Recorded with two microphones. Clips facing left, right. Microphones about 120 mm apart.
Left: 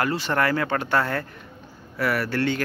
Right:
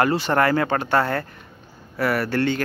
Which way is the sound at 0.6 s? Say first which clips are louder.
Right 3 dB; 35° right (ahead or behind).